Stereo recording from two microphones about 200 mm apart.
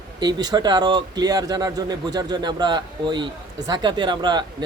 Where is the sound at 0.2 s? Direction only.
20° right (ahead or behind).